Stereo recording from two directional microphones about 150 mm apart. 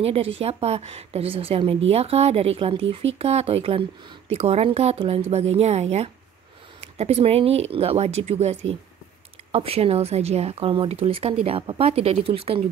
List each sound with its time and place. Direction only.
0.0 s a woman's voice: 40° right (ahead or behind)